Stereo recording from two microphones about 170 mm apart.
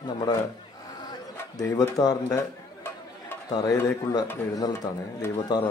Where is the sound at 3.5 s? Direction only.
20° left (ahead or behind).